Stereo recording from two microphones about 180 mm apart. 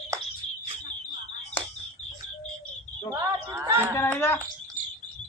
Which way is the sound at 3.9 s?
15° left (ahead or behind).